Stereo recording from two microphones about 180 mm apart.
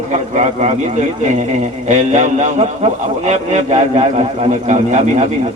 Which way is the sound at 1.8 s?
40° right (ahead or behind).